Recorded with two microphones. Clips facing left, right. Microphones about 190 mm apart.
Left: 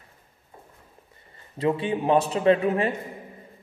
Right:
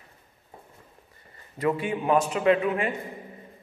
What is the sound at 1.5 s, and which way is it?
A man's voice, 25° left (ahead or behind).